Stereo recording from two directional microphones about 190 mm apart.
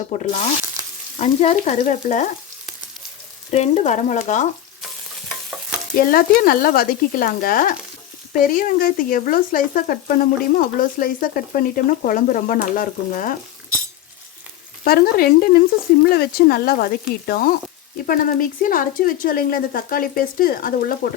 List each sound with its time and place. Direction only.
0.1 s stir: 40° left (ahead or behind)
3.5 s stir: 35° left (ahead or behind)
6.0 s speech: 50° left (ahead or behind)
14.8 s speech: 55° left (ahead or behind)